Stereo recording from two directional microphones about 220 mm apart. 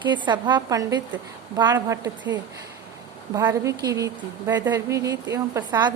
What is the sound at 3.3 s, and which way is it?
Speech, 15° right (ahead or behind).